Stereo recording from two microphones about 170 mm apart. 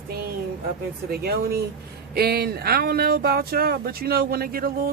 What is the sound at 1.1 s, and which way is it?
Speech, 65° right (ahead or behind).